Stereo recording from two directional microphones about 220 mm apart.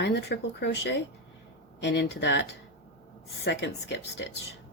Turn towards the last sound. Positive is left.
turn(degrees=50)  # may be behind; listen again after turning